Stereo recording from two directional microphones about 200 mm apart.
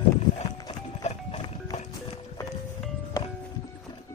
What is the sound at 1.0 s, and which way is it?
Livestock, 30° left (ahead or behind).